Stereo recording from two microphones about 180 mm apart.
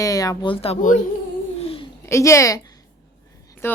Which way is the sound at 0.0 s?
20° left (ahead or behind).